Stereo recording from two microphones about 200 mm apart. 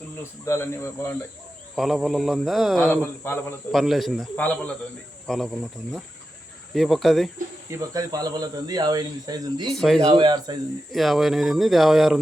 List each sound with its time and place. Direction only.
0.2 s speech: 15° left (ahead or behind)
1.7 s speech: centre (ahead or behind)
3.8 s speech: centre (ahead or behind)
7.7 s speech: 15° right (ahead or behind)
9.6 s speech: centre (ahead or behind)
10.2 s speech: 20° right (ahead or behind)
10.9 s speech: centre (ahead or behind)